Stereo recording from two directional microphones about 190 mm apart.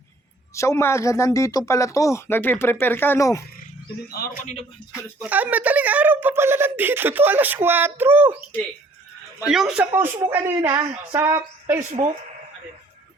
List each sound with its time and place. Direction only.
0.5 s speech: 15° left (ahead or behind)
4.1 s speech: 50° left (ahead or behind)
5.2 s speech: 10° right (ahead or behind)
9.5 s speech: centre (ahead or behind)
11.8 s speech: 35° right (ahead or behind)